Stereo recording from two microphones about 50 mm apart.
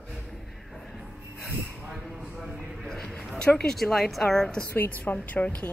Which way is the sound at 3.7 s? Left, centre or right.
Centre.